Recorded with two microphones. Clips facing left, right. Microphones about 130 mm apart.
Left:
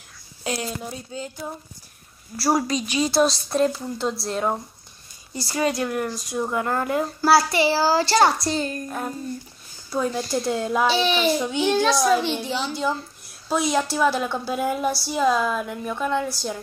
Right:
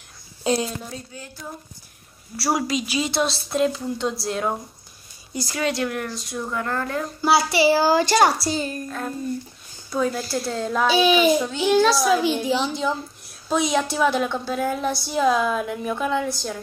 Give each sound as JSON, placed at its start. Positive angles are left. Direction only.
{"t": 0.4, "sound": "a sound", "side_deg": -25}
{"t": 0.8, "sound": "speech", "side_deg": 20}
{"t": 2.4, "sound": "a woman's voice", "side_deg": -5}
{"t": 7.2, "sound": "a woman's voice", "side_deg": 0}
{"t": 7.8, "sound": "a woman's voice", "side_deg": -20}
{"t": 8.8, "sound": "speech", "side_deg": 15}
{"t": 9.8, "sound": "a woman's voice", "side_deg": 5}
{"t": 10.5, "sound": "speech", "side_deg": 10}
{"t": 10.9, "sound": "a woman's voice", "side_deg": -10}
{"t": 11.3, "sound": "speech", "side_deg": 10}
{"t": 11.6, "sound": "a woman's voice", "side_deg": -5}